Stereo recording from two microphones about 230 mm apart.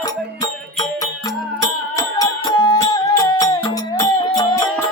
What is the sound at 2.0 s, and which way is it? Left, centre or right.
Music, centre.